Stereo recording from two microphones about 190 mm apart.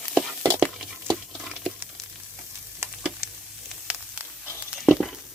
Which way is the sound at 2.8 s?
15° right (ahead or behind).